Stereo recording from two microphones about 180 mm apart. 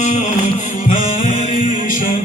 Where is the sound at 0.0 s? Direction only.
45° left (ahead or behind).